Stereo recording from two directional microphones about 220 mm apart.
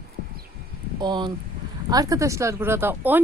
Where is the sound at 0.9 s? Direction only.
20° right (ahead or behind).